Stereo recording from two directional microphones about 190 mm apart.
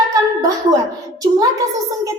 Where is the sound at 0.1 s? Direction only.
20° right (ahead or behind).